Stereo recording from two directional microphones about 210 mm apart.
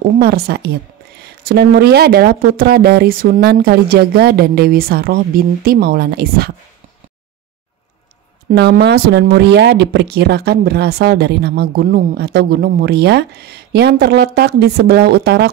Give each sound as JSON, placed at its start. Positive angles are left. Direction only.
{"t": 0.2, "sound": "speech", "side_deg": -50}
{"t": 8.5, "sound": "speech", "side_deg": -50}